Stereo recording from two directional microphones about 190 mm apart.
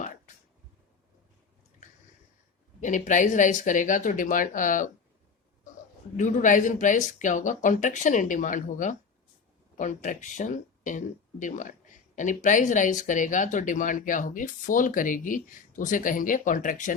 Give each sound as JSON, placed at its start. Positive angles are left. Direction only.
{"t": 2.8, "sound": "speech", "side_deg": 40}
{"t": 6.1, "sound": "speech", "side_deg": 40}